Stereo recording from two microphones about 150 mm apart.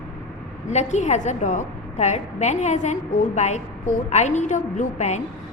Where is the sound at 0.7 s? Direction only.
50° left (ahead or behind).